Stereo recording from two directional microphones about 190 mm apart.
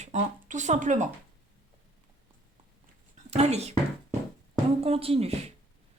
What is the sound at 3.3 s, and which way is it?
Speech, 35° right (ahead or behind).